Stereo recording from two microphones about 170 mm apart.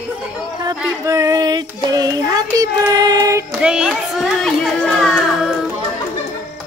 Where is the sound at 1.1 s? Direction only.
20° right (ahead or behind).